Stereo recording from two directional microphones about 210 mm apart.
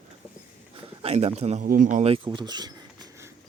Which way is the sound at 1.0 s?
30° right (ahead or behind).